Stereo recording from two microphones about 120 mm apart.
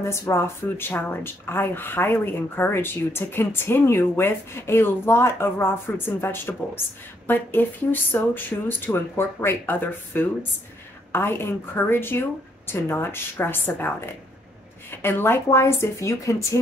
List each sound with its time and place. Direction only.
0.0 s speech: 20° left (ahead or behind)